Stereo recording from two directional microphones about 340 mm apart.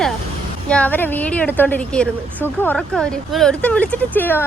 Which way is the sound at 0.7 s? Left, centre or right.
Centre.